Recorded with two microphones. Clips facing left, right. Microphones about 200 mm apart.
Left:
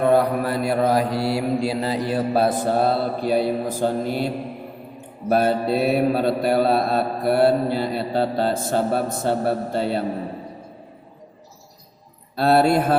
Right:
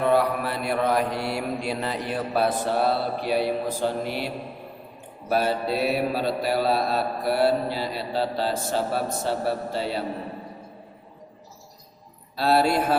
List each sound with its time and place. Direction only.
0.0 s mantra: 45° left (ahead or behind)
12.4 s mantra: 55° left (ahead or behind)